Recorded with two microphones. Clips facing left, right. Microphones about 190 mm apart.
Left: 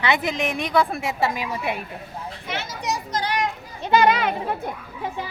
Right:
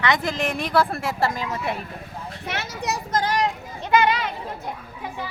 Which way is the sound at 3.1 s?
45° right (ahead or behind).